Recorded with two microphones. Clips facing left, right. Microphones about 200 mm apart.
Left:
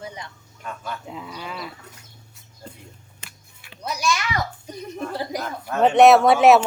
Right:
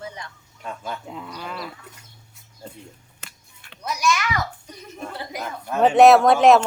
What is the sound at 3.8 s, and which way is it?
Speech, 30° left (ahead or behind).